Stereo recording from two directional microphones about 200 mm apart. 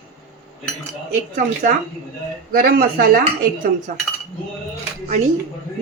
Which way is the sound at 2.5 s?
45° right (ahead or behind).